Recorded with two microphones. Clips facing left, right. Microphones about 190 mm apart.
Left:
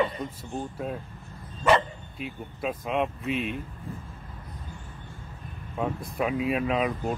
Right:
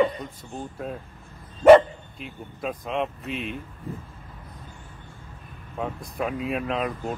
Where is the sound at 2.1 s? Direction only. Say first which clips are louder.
Left 4 dB; 5° left (ahead or behind).